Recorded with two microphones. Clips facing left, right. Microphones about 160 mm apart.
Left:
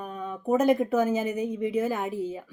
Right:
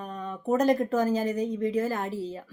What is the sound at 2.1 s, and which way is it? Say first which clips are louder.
Speech: left 2 dB; 50° left (ahead or behind).